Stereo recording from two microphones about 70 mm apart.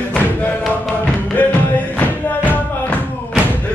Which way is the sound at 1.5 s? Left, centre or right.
Left.